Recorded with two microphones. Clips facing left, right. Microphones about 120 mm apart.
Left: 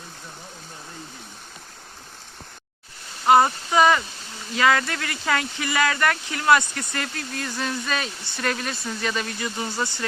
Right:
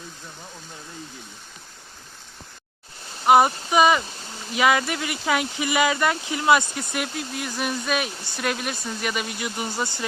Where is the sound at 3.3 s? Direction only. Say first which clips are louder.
Right 1 dB; 15° right (ahead or behind).